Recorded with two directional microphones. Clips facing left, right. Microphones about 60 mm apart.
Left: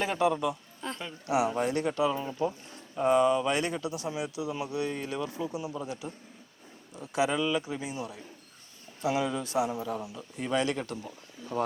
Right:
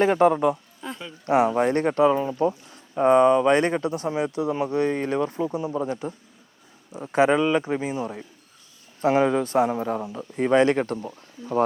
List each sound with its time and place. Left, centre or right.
0.0 s speech: right
0.8 s a sound: centre
1.5 s a man's voice: right